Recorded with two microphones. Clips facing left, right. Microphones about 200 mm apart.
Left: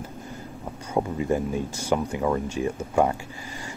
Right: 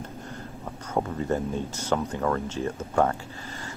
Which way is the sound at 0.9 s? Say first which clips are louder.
Left 2 dB; 10° left (ahead or behind).